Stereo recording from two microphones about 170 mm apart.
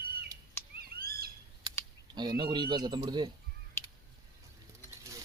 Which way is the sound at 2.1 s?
25° right (ahead or behind).